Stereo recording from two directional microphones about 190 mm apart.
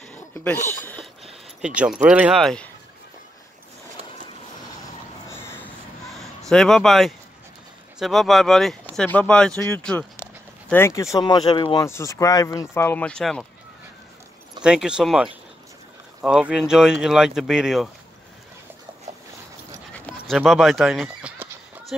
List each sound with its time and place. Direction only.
0.1 s a sound: 5° left (ahead or behind)
0.7 s speech: 10° left (ahead or behind)
1.2 s speech: 5° right (ahead or behind)
6.1 s speech: centre (ahead or behind)
14.6 s speech: 5° right (ahead or behind)
19.9 s horse: 5° left (ahead or behind)